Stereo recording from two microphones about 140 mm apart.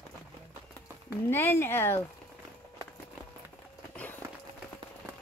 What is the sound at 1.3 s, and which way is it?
Speech, 15° left (ahead or behind).